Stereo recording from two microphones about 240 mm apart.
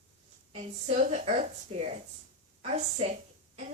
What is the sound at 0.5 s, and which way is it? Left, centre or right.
Speech, right.